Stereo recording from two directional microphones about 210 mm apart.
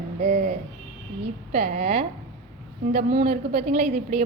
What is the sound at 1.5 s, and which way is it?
A woman's voice, 35° right (ahead or behind).